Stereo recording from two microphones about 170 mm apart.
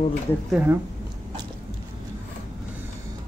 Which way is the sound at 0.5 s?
10° right (ahead or behind).